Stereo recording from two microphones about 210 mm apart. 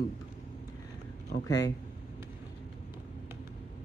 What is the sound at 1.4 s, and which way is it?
Speech, 15° left (ahead or behind).